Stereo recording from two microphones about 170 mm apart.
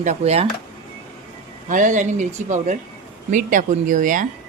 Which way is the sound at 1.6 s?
50° right (ahead or behind).